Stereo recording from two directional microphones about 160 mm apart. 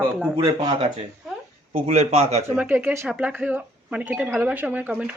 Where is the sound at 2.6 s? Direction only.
10° right (ahead or behind).